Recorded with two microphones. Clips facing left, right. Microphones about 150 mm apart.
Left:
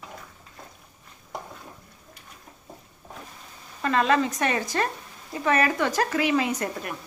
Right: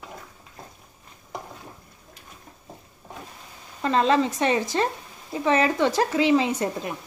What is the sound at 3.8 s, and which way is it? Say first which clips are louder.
Speech: right 2 dB; 25° right (ahead or behind).